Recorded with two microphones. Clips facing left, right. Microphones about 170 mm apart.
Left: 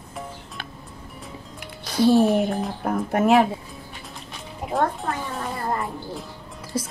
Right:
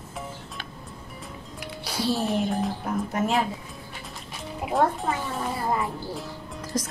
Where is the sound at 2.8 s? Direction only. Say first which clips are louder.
Left 5 dB; 55° left (ahead or behind).